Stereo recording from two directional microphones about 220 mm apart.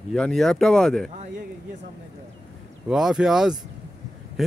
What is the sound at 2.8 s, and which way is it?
Speech, 5° right (ahead or behind).